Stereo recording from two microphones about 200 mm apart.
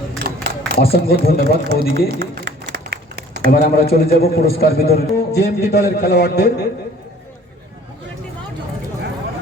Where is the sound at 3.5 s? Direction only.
50° left (ahead or behind).